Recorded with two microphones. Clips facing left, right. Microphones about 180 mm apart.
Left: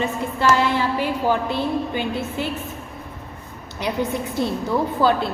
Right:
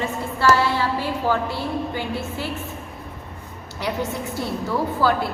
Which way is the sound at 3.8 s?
20° left (ahead or behind).